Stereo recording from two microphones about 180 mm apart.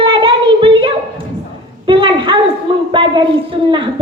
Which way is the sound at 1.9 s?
25° right (ahead or behind).